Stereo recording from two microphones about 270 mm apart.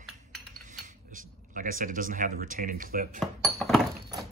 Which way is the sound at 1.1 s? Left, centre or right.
Right.